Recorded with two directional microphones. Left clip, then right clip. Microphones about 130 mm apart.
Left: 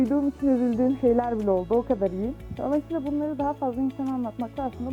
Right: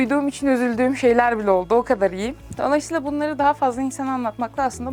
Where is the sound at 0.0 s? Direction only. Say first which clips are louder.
Right 4 dB; 30° left (ahead or behind).